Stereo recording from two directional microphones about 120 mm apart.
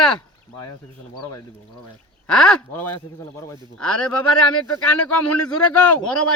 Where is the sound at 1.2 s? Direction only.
30° left (ahead or behind).